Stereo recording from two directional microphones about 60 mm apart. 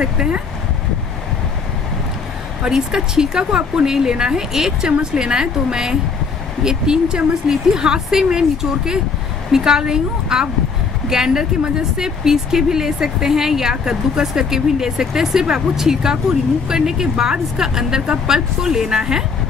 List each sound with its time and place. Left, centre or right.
0.0 s speech: centre
2.6 s speech: centre